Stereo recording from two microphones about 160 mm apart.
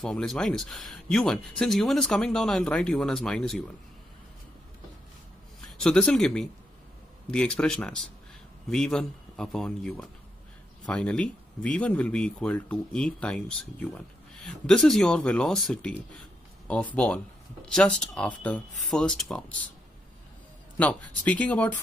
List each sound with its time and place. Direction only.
0.0 s speech: 5° left (ahead or behind)
5.6 s speech: 5° left (ahead or behind)
20.7 s speech: 10° left (ahead or behind)